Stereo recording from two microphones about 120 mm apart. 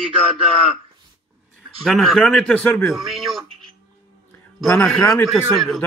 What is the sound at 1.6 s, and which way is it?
A man's voice, centre (ahead or behind).